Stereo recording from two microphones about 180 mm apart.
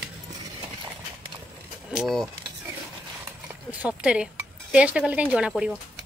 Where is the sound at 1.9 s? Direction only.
Centre (ahead or behind).